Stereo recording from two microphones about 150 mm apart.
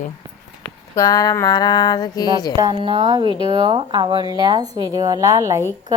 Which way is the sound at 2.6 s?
30° right (ahead or behind).